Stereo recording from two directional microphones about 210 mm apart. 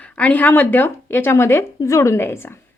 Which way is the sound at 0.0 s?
5° left (ahead or behind).